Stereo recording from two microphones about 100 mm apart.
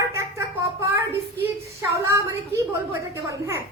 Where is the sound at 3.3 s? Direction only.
25° right (ahead or behind).